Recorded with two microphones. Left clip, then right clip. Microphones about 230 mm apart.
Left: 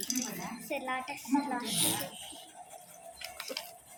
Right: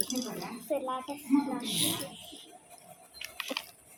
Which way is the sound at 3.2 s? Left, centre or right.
Left.